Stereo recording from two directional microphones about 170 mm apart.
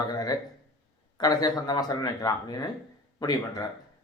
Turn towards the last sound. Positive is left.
turn(degrees=25)  # may be behind; listen again after turning